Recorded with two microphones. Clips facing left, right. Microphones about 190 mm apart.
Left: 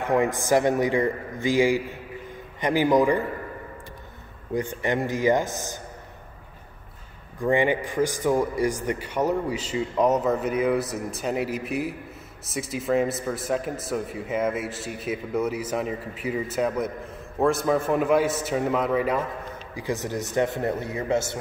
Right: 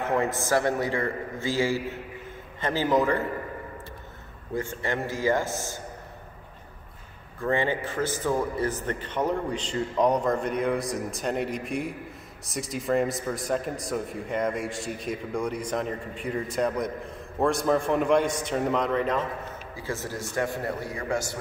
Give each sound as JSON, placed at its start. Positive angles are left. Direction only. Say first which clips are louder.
{"t": 0.1, "sound": "a man's voice", "louder": "left 5 dB", "side_deg": 15}
{"t": 4.6, "sound": "a man's voice", "louder": "left 4 dB", "side_deg": 15}
{"t": 7.3, "sound": "a man's voice", "louder": "left 4 dB", "side_deg": 15}